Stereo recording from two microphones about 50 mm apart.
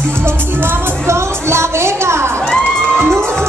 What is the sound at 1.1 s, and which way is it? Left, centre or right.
Music, right.